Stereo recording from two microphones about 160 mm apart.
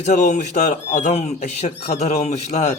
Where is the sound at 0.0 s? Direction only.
45° left (ahead or behind).